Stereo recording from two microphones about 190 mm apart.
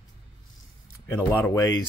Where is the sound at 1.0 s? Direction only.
10° left (ahead or behind).